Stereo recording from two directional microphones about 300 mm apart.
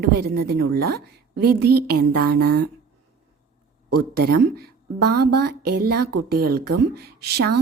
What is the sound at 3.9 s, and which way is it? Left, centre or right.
Speech, right.